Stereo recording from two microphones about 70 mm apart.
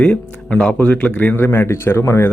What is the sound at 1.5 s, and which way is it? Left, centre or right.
Speech, left.